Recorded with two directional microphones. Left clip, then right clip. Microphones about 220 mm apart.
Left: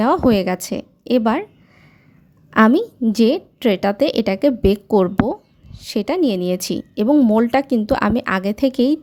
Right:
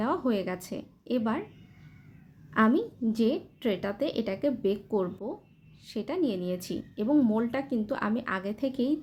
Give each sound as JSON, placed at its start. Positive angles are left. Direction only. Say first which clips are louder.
{"t": 0.0, "sound": "a woman's voice", "louder": "left 13 dB", "side_deg": 45}
{"t": 2.5, "sound": "a woman's voice", "louder": "left 11 dB", "side_deg": 45}